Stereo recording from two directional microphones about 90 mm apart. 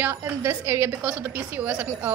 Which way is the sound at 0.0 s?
25° right (ahead or behind).